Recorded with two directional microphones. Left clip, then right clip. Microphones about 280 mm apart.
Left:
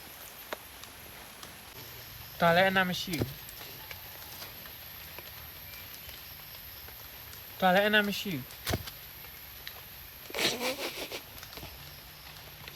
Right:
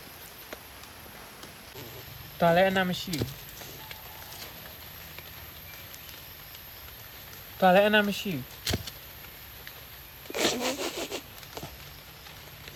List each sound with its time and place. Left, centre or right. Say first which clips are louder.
2.4 s speech: right 2 dB; centre
7.6 s speech: right 4 dB; centre
10.3 s vehicle: right 3 dB; centre